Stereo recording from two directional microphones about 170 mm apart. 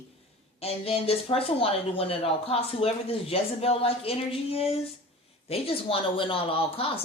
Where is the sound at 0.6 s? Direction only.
35° left (ahead or behind).